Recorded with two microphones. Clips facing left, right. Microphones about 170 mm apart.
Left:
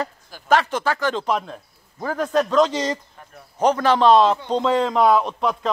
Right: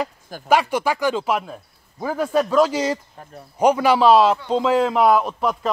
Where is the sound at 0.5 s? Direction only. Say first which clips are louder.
Right 1 dB; 10° right (ahead or behind).